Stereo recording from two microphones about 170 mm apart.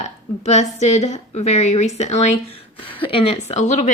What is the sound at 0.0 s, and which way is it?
A woman's voice, 40° left (ahead or behind).